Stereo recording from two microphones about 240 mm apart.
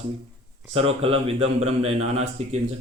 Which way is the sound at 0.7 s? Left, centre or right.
Right.